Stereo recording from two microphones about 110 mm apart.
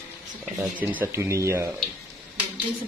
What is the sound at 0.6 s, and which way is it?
Speech, 15° right (ahead or behind).